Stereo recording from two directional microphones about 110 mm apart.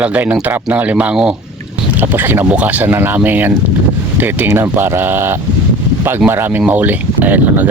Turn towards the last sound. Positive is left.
turn(degrees=-15)  # may be behind; listen again after turning